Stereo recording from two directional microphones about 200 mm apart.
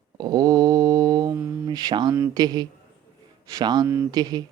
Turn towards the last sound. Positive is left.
turn(degrees=-20)  # may be behind; listen again after turning